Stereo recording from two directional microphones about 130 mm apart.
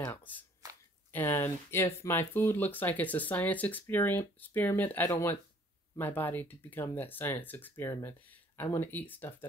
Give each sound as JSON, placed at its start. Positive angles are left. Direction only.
{"t": 0.0, "sound": "speech", "side_deg": 15}